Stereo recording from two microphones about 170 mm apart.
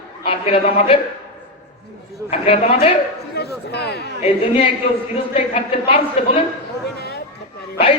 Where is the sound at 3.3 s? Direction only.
75° left (ahead or behind).